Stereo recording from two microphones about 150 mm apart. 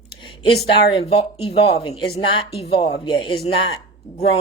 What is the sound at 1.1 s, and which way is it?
A woman's voice, 40° left (ahead or behind).